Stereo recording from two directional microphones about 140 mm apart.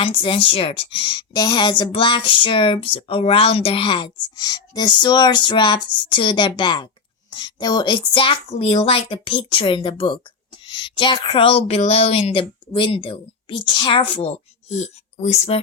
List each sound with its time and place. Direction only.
0.2 s a woman's voice: 40° left (ahead or behind)